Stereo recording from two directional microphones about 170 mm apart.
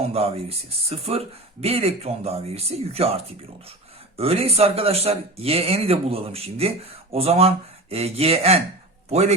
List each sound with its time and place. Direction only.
0.0 s speech: 35° right (ahead or behind)
4.2 s a man's voice: 35° right (ahead or behind)